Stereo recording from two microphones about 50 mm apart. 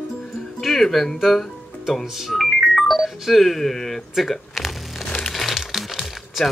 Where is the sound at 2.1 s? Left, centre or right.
Centre.